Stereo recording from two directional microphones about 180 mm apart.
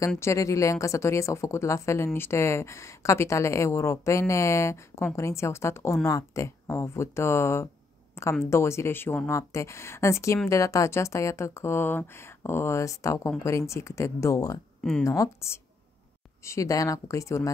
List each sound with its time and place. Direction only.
0.2 s a woman's voice: 15° left (ahead or behind)
14.8 s speech: 5° left (ahead or behind)
15.0 s a woman's voice: 15° left (ahead or behind)